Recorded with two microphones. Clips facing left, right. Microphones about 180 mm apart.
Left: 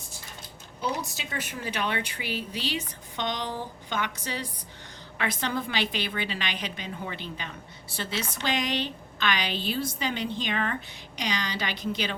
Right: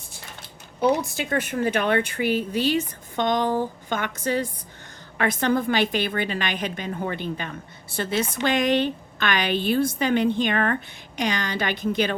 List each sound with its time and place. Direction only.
0.8 s a woman's voice: 60° right (ahead or behind)